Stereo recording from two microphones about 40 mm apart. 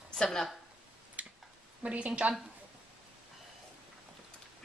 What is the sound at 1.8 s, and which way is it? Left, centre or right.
Speech, right.